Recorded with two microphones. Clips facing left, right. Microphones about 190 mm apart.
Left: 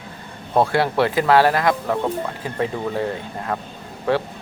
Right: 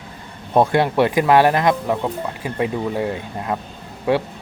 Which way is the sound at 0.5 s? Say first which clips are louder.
Right 2 dB; 15° right (ahead or behind).